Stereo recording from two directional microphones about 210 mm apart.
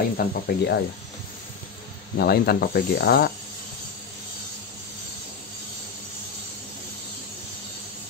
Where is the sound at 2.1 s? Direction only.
50° left (ahead or behind).